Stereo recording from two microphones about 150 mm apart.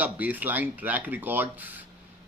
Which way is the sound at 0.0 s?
10° right (ahead or behind).